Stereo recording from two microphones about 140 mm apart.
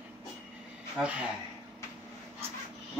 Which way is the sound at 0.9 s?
10° right (ahead or behind).